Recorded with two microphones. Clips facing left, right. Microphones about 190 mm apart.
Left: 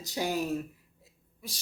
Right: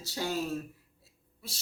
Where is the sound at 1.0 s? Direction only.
15° left (ahead or behind).